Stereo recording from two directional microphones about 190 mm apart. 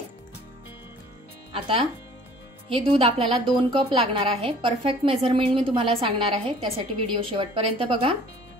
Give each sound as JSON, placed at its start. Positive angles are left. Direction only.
{"t": 1.5, "sound": "a woman's voice", "side_deg": -30}